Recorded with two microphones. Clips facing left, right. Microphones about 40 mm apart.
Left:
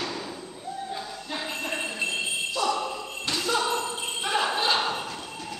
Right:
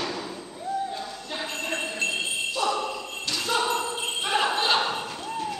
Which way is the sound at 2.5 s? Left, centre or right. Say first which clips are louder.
Even; centre.